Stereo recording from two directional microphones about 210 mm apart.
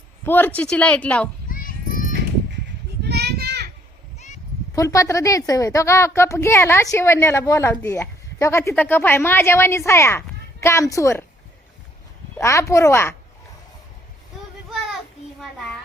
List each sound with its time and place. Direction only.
0.3 s a woman's voice: 10° left (ahead or behind)
1.5 s children playing: 40° left (ahead or behind)
3.0 s children playing: 50° right (ahead or behind)
4.7 s a woman's voice: 15° left (ahead or behind)
12.4 s a woman's voice: 15° left (ahead or behind)